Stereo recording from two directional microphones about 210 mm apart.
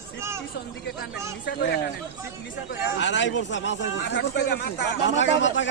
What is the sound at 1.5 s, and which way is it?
Speech, 50° left (ahead or behind).